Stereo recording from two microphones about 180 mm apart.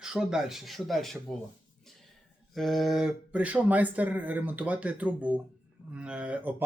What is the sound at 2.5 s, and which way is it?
Speech, centre (ahead or behind).